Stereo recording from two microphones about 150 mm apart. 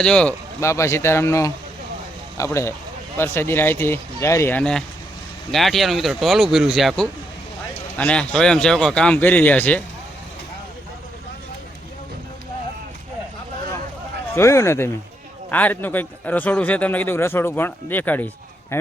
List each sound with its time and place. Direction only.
0.0 s speech: 5° left (ahead or behind)
0.6 s a man's voice: 20° left (ahead or behind)
14.3 s a man's voice: 20° left (ahead or behind)